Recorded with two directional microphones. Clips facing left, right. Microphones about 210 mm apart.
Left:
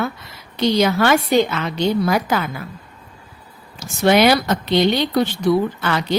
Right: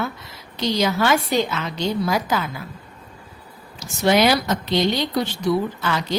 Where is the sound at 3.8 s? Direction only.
60° left (ahead or behind).